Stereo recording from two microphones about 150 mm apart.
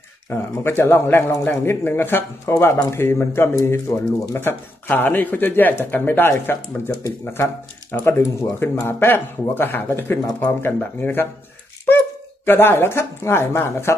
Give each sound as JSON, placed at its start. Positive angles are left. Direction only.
{"t": 0.3, "sound": "speech", "side_deg": 15}
{"t": 12.4, "sound": "speech", "side_deg": 15}